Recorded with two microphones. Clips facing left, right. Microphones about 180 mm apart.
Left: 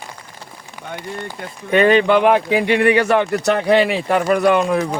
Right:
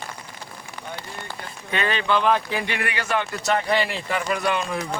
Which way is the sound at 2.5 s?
15° left (ahead or behind).